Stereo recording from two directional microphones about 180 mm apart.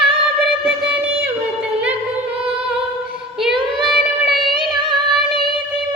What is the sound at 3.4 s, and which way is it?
Child singing, centre (ahead or behind).